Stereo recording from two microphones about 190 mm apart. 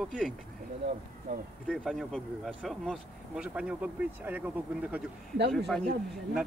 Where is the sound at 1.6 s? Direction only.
Centre (ahead or behind).